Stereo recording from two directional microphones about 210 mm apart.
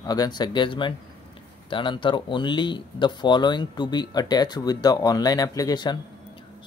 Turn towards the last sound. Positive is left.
turn(degrees=20)  # may be behind; listen again after turning